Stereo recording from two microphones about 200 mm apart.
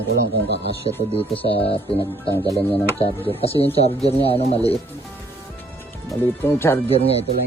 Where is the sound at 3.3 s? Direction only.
30° left (ahead or behind).